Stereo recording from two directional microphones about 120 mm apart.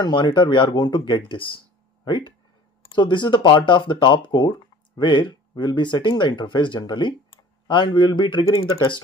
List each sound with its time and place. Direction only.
0.0 s speech: 40° left (ahead or behind)
2.9 s speech: 40° left (ahead or behind)